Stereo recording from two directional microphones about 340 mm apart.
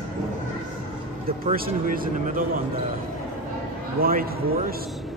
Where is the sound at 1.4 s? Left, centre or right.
Right.